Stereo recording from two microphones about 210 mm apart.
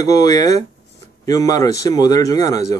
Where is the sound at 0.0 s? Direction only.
15° left (ahead or behind).